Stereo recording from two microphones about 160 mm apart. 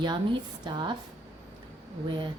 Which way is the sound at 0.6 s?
30° right (ahead or behind).